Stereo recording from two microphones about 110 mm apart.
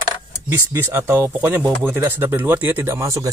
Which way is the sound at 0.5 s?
20° right (ahead or behind).